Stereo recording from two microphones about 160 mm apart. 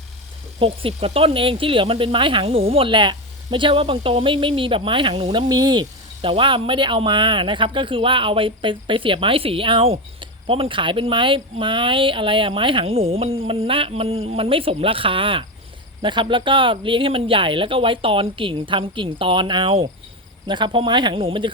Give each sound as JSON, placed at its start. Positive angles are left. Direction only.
{"t": 0.6, "sound": "speech", "side_deg": -35}